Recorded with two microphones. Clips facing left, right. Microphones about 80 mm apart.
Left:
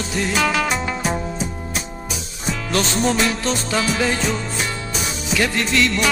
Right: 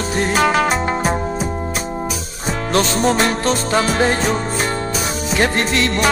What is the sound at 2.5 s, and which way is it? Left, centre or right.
Music, right.